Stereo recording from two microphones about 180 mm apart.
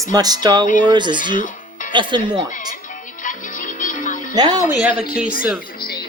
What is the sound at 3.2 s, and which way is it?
Music, 45° left (ahead or behind).